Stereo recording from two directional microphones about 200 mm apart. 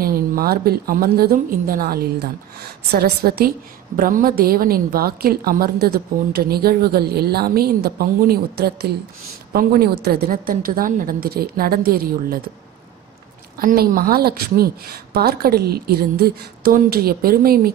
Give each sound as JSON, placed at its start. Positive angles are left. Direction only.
{"t": 0.0, "sound": "a woman's voice", "side_deg": -50}
{"t": 3.3, "sound": "a woman's voice", "side_deg": -50}
{"t": 13.6, "sound": "a woman's voice", "side_deg": -45}